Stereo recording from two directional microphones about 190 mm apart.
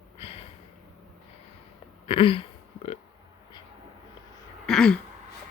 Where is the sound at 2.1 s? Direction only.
30° left (ahead or behind).